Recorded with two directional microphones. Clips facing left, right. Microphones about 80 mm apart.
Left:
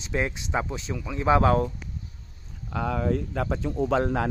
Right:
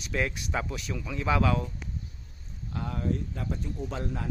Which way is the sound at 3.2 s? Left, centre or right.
Left.